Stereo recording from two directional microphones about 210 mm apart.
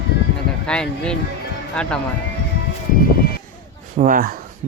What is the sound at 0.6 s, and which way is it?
Speech, 5° left (ahead or behind).